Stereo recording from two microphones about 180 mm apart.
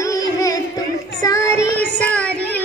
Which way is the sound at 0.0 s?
20° left (ahead or behind).